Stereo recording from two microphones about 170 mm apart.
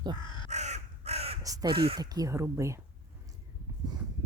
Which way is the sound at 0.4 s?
40° right (ahead or behind).